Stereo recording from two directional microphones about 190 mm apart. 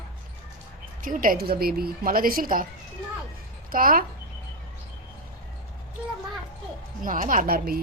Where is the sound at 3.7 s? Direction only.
50° right (ahead or behind).